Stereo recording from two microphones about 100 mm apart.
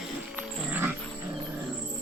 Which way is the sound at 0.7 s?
15° right (ahead or behind).